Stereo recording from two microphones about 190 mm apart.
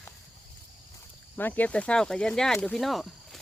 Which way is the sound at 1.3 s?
10° left (ahead or behind).